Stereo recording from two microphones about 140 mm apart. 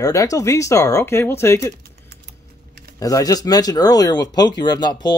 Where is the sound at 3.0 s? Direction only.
25° left (ahead or behind).